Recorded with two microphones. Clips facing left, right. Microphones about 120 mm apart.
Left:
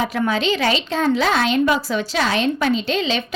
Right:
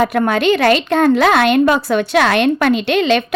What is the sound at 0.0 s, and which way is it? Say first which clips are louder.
A woman's voice: right 6 dB; 60° right (ahead or behind).